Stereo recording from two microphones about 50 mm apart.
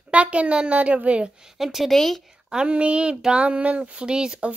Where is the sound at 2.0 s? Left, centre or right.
Centre.